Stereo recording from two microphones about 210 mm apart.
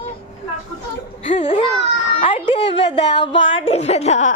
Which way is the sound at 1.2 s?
35° left (ahead or behind).